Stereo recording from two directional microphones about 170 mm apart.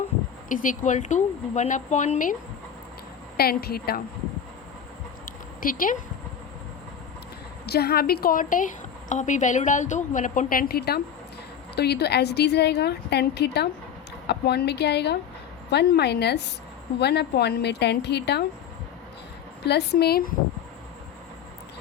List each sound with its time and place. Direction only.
0.4 s a woman's voice: 50° left (ahead or behind)
3.3 s a woman's voice: 65° left (ahead or behind)
5.6 s a woman's voice: 55° left (ahead or behind)
7.6 s a woman's voice: 70° left (ahead or behind)
19.6 s a woman's voice: 80° left; by 20.3 s 65° left (ahead or behind)